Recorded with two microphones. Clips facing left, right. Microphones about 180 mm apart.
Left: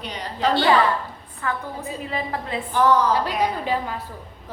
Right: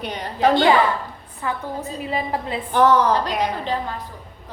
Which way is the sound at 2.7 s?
60° right (ahead or behind).